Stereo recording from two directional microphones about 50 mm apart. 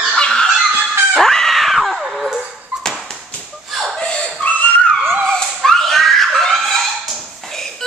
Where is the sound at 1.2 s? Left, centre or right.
Centre.